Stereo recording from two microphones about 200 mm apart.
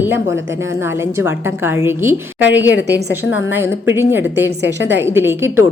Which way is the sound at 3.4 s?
10° right (ahead or behind).